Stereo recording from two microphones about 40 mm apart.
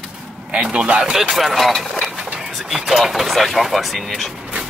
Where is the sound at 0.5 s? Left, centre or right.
Right.